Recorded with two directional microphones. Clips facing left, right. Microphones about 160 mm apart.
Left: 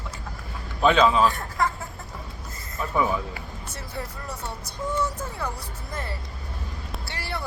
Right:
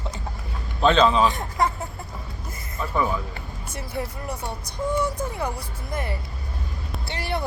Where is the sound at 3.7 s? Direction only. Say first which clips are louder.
Right 6 dB; 15° right (ahead or behind).